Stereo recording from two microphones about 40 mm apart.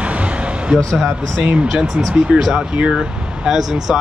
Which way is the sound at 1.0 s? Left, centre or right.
Centre.